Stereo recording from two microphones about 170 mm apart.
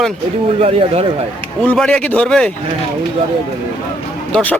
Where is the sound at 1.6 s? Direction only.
5° left (ahead or behind).